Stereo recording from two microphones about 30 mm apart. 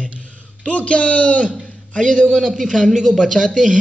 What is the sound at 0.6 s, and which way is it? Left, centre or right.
Speech, left.